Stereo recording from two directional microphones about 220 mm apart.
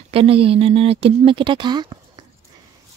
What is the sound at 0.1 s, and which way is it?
Speech, 25° right (ahead or behind).